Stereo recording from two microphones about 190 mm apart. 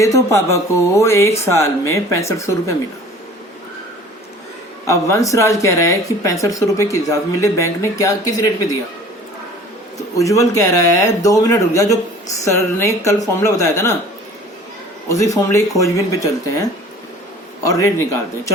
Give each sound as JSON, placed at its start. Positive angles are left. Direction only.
{"t": 0.0, "sound": "speech", "side_deg": 15}
{"t": 4.9, "sound": "speech", "side_deg": 15}
{"t": 10.2, "sound": "speech", "side_deg": 15}
{"t": 15.1, "sound": "speech", "side_deg": 15}